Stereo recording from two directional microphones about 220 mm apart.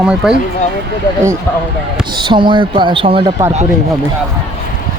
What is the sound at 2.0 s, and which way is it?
Speech, 20° right (ahead or behind).